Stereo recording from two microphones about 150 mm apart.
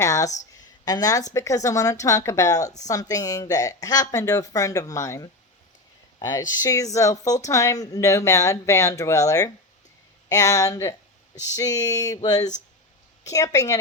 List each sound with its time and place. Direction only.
0.0 s speech: 20° left (ahead or behind)